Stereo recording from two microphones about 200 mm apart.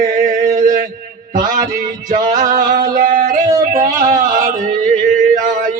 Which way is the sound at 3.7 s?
40° right (ahead or behind).